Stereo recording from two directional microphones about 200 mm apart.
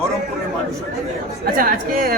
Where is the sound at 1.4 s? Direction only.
45° right (ahead or behind).